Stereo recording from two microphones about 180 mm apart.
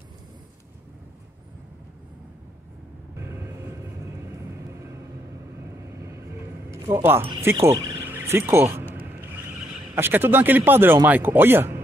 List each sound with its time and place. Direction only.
5.9 s vehicle: 15° right (ahead or behind)
6.7 s speech: 15° right (ahead or behind)
9.9 s speech: 10° right (ahead or behind)